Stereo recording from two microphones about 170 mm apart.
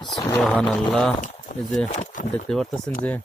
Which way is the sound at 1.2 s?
50° left (ahead or behind).